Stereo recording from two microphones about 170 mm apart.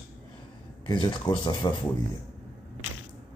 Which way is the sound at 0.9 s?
25° left (ahead or behind).